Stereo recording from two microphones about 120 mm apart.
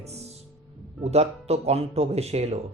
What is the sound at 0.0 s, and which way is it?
Music, 60° right (ahead or behind).